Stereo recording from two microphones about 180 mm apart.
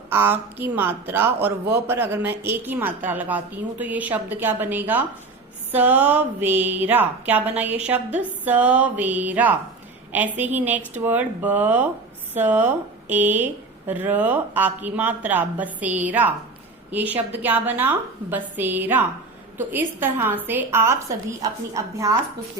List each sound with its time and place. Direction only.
0.1 s a woman's voice: 10° right (ahead or behind)